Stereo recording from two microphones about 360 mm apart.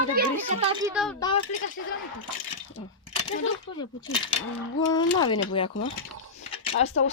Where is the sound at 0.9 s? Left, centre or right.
Centre.